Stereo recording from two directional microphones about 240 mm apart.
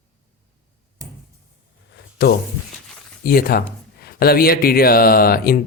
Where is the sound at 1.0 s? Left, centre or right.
Centre.